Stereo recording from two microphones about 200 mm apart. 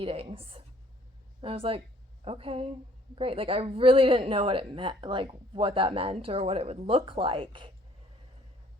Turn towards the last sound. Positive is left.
turn(degrees=-25)  # may be behind; listen again after turning